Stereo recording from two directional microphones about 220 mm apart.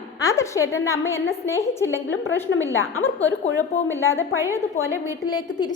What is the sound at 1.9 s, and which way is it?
A woman's voice, 60° left (ahead or behind).